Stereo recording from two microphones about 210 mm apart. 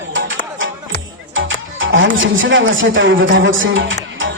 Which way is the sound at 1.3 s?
65° right (ahead or behind).